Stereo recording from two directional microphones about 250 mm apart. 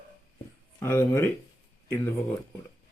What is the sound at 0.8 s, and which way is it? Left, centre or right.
Speech, centre.